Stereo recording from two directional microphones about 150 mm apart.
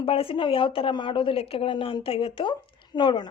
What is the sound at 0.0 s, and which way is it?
Speech, 35° left (ahead or behind).